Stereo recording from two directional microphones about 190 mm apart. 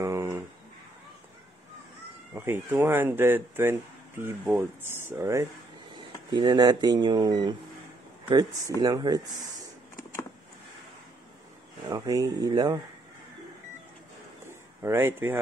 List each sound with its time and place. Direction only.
0.0 s a sound: 15° right (ahead or behind)
2.3 s speech: 15° right (ahead or behind)
11.9 s speech: 20° right (ahead or behind)
14.8 s speech: 15° right (ahead or behind)